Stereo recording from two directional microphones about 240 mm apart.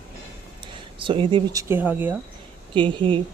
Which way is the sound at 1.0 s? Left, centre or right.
Right.